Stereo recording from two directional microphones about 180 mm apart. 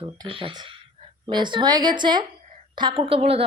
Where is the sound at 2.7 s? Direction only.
25° right (ahead or behind).